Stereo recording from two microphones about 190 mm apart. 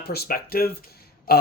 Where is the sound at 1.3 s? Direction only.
55° left (ahead or behind).